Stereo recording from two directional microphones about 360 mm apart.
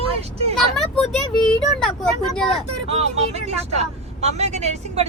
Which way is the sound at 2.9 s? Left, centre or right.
Centre.